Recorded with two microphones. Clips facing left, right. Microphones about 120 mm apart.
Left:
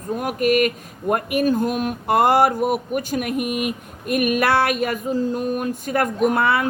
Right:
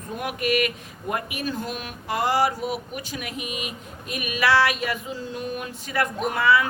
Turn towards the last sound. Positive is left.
turn(degrees=55)  # may be behind; listen again after turning